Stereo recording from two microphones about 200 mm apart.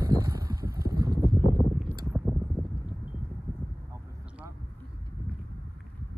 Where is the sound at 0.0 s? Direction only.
20° right (ahead or behind).